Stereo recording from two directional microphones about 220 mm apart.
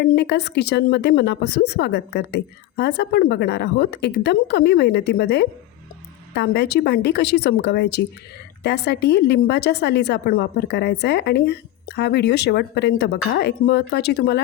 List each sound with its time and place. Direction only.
0.0 s a woman's voice: 50° left (ahead or behind)